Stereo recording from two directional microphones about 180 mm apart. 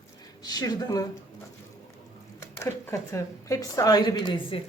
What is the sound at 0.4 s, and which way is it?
Speech, 20° left (ahead or behind).